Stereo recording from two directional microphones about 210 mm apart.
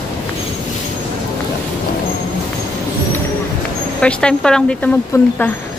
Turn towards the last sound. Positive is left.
turn(degrees=15)  # may be behind; listen again after turning